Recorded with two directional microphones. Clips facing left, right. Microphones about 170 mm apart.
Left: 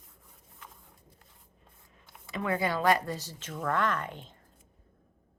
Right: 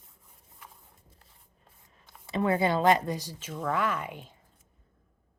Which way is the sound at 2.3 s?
30° right (ahead or behind).